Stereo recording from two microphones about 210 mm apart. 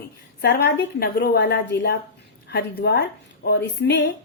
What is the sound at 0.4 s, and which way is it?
A woman's voice, 55° left (ahead or behind).